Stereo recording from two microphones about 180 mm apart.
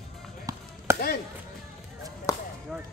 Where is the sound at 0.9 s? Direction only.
15° right (ahead or behind).